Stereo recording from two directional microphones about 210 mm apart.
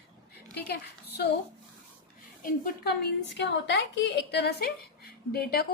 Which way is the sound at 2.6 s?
50° left (ahead or behind).